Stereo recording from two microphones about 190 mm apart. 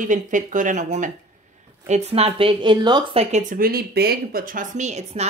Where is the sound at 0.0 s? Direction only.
40° right (ahead or behind).